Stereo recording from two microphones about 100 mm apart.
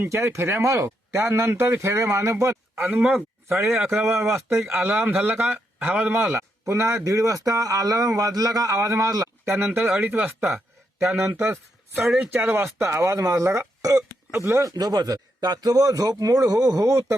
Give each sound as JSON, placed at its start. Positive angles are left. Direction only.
{"t": 0.0, "sound": "speech", "side_deg": -25}
{"t": 3.6, "sound": "a man's voice", "side_deg": -5}
{"t": 4.0, "sound": "speech", "side_deg": -30}
{"t": 6.1, "sound": "speech", "side_deg": -25}
{"t": 10.0, "sound": "speech", "side_deg": -15}
{"t": 12.0, "sound": "speech", "side_deg": -5}
{"t": 12.3, "sound": "speech", "side_deg": -20}